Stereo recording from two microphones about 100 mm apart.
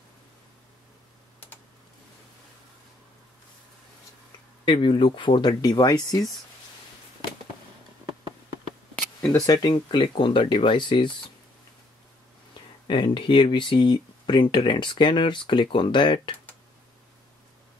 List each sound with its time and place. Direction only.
4.6 s speech: 55° left (ahead or behind)
5.5 s speech: 40° left (ahead or behind)
9.5 s speech: 45° left (ahead or behind)
12.8 s speech: 55° left (ahead or behind)